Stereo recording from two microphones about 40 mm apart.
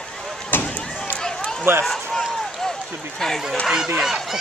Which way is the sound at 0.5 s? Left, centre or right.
Left.